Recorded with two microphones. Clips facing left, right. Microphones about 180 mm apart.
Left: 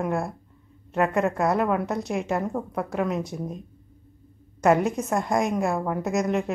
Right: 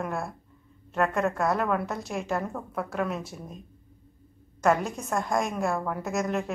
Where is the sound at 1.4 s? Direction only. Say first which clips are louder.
Left 3 dB; 15° left (ahead or behind).